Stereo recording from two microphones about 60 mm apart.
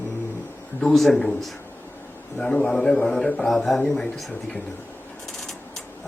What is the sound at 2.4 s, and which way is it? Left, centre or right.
Speech, centre.